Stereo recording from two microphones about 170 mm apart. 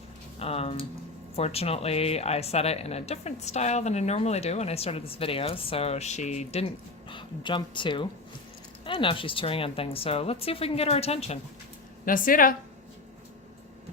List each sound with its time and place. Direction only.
0.3 s speech: 35° left (ahead or behind)
7.1 s speech: 30° left (ahead or behind)
12.0 s speech: 55° left (ahead or behind)